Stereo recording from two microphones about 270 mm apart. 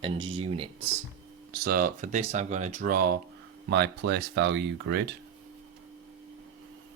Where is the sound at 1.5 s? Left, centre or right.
Right.